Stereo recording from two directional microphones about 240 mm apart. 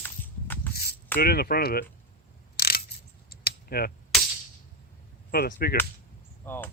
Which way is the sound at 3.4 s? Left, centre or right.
Left.